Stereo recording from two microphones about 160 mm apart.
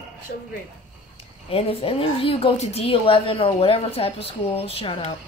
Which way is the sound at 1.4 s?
35° left (ahead or behind).